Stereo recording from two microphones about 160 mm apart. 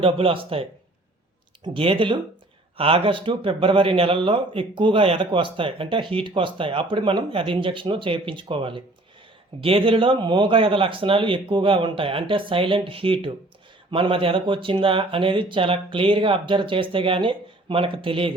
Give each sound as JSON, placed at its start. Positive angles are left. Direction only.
{"t": 0.0, "sound": "speech", "side_deg": -35}